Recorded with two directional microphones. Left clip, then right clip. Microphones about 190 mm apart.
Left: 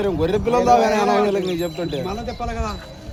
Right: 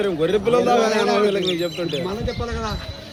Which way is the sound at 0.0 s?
55° left (ahead or behind).